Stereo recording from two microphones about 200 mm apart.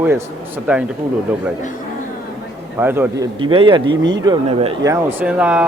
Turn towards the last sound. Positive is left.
turn(degrees=-5)  # may be behind; listen again after turning